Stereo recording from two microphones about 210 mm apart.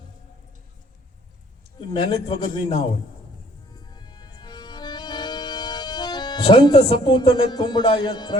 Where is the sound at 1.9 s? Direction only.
25° left (ahead or behind).